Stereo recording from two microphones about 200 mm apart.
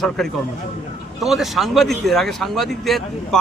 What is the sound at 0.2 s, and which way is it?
Speech, centre (ahead or behind).